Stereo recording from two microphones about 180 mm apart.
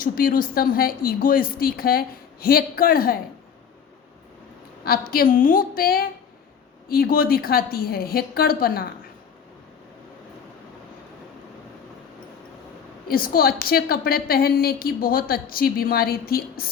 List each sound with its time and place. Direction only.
0.0 s a woman's voice: 50° left (ahead or behind)
4.9 s a woman's voice: 55° left (ahead or behind)
13.1 s a woman's voice: 55° left (ahead or behind)